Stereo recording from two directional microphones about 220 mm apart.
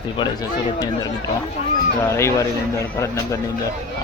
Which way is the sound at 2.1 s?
10° left (ahead or behind).